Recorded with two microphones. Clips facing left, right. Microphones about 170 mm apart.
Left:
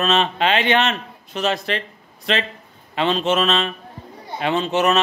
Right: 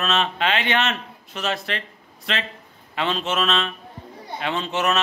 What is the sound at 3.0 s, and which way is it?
A man's voice, 30° left (ahead or behind).